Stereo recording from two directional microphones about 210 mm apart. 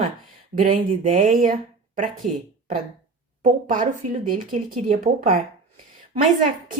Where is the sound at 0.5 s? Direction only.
35° right (ahead or behind).